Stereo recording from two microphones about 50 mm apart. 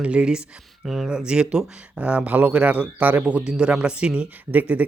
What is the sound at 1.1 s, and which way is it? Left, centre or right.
Speech, centre.